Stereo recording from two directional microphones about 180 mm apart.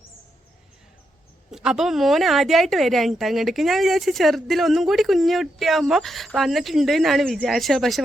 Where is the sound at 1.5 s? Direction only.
5° right (ahead or behind).